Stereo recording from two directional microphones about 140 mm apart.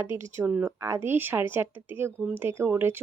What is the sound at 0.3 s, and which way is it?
Speech, 10° right (ahead or behind).